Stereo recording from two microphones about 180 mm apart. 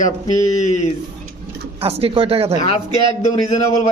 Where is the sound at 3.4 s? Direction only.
40° left (ahead or behind).